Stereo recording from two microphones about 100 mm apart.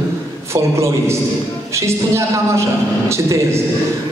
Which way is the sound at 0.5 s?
30° right (ahead or behind).